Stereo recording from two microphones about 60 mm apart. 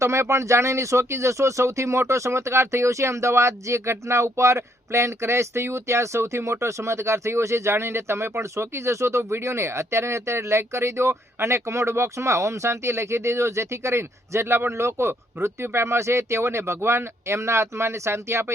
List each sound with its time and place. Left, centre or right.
0.0 s speech: right